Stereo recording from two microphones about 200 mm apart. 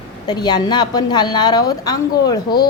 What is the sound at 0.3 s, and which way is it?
A woman's voice, 20° left (ahead or behind).